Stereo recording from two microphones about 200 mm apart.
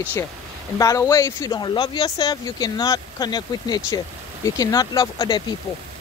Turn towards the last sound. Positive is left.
turn(degrees=20)  # may be behind; listen again after turning